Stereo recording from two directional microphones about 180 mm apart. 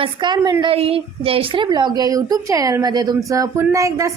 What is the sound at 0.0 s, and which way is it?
A woman's voice, 25° right (ahead or behind).